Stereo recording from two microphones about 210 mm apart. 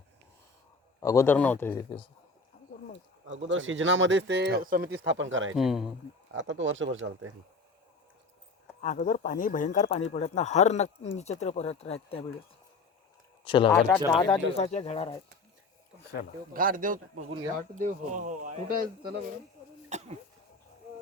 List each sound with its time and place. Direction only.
0.9 s a man's voice: 15° left (ahead or behind)
3.2 s speech: 65° right (ahead or behind); by 4.9 s 45° right (ahead or behind)
4.9 s speech: 60° right (ahead or behind)
5.5 s speech: centre (ahead or behind)
6.3 s speech: 65° right (ahead or behind)
8.8 s speech: 40° left (ahead or behind)
13.4 s speech: 25° left (ahead or behind)
13.7 s a man's voice: 5° left (ahead or behind)
14.5 s speech: 30° left (ahead or behind)
16.5 s a man's voice: 40° right (ahead or behind)
19.9 s cough: 30° right (ahead or behind)